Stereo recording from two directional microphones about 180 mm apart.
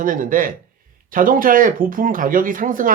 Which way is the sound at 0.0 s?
50° right (ahead or behind).